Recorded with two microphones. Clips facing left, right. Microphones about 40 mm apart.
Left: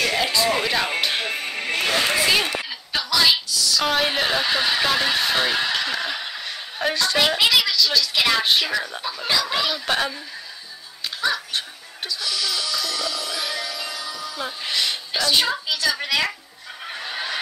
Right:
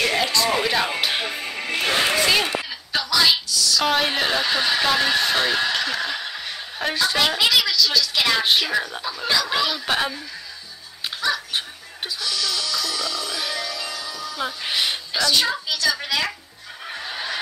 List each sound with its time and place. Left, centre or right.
0.0 s music: centre
1.3 s music: left
1.9 s a sound: centre
2.1 s a sound: centre
2.9 s a woman's voice: centre
11.1 s dog: centre
12.2 s music: centre
14.4 s speech: centre
15.1 s a woman's voice: left; by 16.3 s centre
16.8 s fowl: centre